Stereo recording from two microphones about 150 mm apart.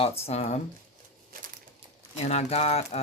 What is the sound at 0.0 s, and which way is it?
Speech, 45° left (ahead or behind).